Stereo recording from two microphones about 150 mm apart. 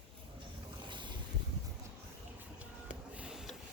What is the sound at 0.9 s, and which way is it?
Boat, 30° right (ahead or behind).